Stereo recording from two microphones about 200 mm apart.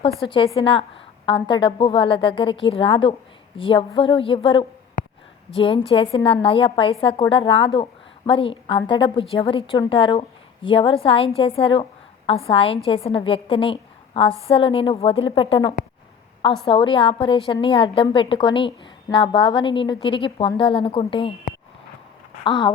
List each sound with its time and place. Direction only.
0.3 s a woman's voice: 25° left (ahead or behind)
22.4 s a woman's voice: 25° left (ahead or behind)